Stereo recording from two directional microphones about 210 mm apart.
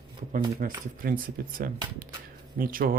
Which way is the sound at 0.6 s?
40° right (ahead or behind).